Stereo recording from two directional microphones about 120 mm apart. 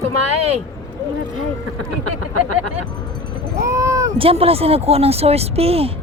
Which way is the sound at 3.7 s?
25° right (ahead or behind).